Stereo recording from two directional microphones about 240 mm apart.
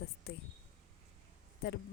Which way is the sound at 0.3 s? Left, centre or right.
Left.